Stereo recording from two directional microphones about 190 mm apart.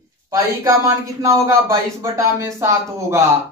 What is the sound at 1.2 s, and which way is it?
Speech, 15° right (ahead or behind).